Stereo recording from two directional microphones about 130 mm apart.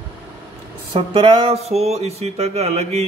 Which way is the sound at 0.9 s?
40° right (ahead or behind).